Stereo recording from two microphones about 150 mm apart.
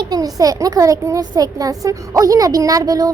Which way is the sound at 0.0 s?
25° right (ahead or behind).